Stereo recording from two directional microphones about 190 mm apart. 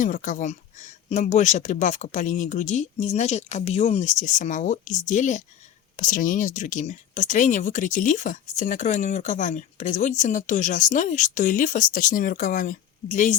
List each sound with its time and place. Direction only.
0.0 s speech: 45° left (ahead or behind)